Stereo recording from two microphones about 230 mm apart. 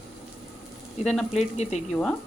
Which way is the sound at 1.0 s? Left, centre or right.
Centre.